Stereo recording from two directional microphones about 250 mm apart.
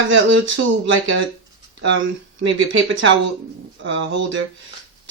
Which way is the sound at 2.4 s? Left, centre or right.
Right.